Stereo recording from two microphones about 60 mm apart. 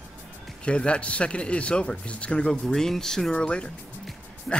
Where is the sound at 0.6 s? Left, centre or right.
Centre.